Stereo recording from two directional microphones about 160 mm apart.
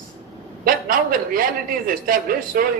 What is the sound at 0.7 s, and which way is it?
A man's voice, 60° right (ahead or behind).